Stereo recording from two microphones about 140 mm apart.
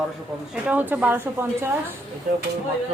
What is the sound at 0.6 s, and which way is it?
A woman's voice, 10° right (ahead or behind).